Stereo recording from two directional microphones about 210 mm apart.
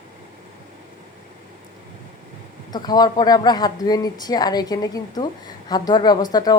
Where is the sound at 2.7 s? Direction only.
20° left (ahead or behind).